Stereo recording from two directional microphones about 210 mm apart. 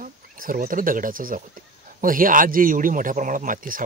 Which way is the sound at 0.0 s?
40° right (ahead or behind).